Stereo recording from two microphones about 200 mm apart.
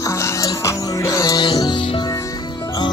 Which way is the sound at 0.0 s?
15° left (ahead or behind).